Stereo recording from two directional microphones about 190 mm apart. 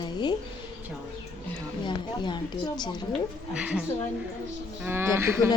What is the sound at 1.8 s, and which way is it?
A woman's voice, 25° left (ahead or behind).